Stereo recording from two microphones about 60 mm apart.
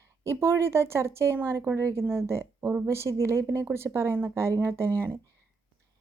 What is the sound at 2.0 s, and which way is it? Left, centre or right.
A woman's voice, right.